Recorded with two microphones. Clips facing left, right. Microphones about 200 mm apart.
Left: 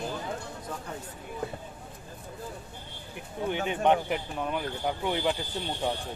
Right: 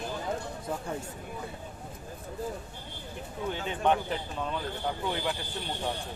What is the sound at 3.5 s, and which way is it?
Speech, 15° left (ahead or behind).